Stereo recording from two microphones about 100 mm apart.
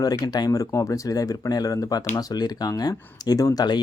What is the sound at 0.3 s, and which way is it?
Speech, 40° left (ahead or behind).